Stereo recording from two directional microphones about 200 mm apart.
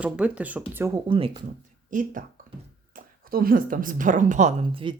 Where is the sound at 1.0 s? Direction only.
25° right (ahead or behind).